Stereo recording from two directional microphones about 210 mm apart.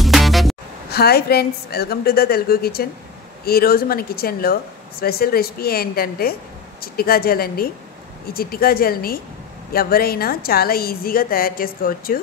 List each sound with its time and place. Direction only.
0.0 s music: centre (ahead or behind)
0.8 s a woman's voice: 50° left (ahead or behind)